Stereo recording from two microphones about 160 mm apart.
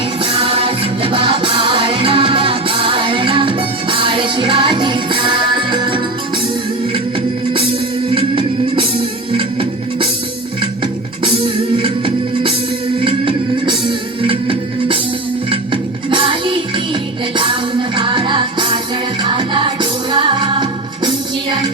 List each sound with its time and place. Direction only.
0.2 s music: 35° right (ahead or behind)
8.1 s music: 35° right (ahead or behind)
11.2 s music: 30° right (ahead or behind)